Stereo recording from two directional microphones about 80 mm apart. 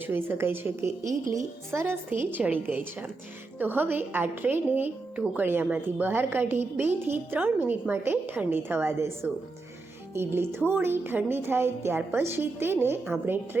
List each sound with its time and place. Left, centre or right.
0.1 s a woman's voice: right